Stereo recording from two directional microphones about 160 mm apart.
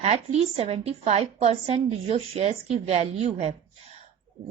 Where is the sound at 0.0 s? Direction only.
40° right (ahead or behind).